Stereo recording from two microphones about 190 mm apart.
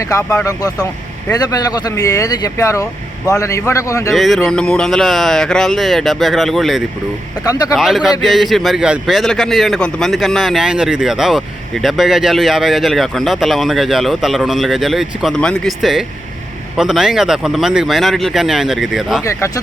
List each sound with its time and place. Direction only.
0.0 s a man's voice: 15° left (ahead or behind)
4.1 s a man's voice: centre (ahead or behind)
19.2 s a man's voice: 15° left (ahead or behind)